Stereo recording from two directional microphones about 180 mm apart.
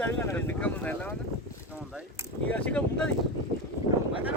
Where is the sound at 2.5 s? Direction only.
10° left (ahead or behind).